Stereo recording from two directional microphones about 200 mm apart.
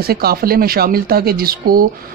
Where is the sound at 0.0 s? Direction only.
50° right (ahead or behind).